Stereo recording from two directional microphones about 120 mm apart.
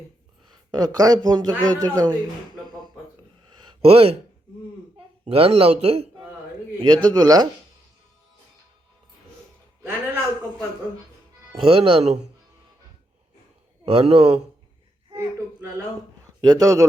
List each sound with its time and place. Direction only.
0.7 s a man's voice: 35° right (ahead or behind)
3.6 s a sound: 45° right (ahead or behind)
5.4 s speech: 55° right (ahead or behind)
6.7 s a man's voice: 35° right (ahead or behind)
11.5 s speech: 50° right (ahead or behind)
13.8 s speech: 50° right (ahead or behind)
15.1 s a sound: 25° right (ahead or behind)
16.4 s speech: 30° right (ahead or behind)